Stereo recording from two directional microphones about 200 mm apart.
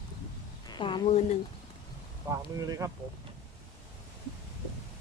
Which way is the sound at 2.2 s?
15° right (ahead or behind).